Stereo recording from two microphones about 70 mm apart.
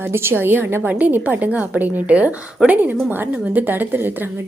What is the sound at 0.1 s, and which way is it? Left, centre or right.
A woman's voice, right.